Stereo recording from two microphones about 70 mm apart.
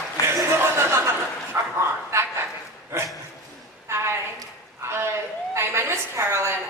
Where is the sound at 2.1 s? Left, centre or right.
Right.